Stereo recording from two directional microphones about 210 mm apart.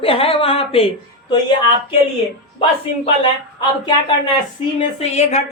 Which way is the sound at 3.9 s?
20° left (ahead or behind).